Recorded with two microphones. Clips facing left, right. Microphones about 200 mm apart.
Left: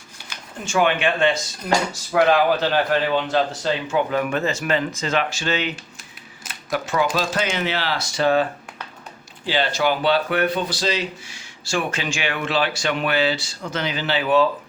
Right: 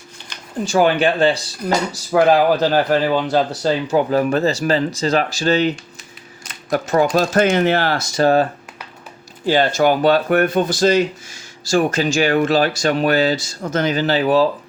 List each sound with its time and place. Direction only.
0.6 s speech: 35° right (ahead or behind)
9.5 s speech: 45° right (ahead or behind)